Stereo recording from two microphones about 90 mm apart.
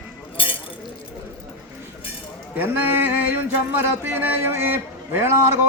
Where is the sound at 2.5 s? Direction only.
25° right (ahead or behind).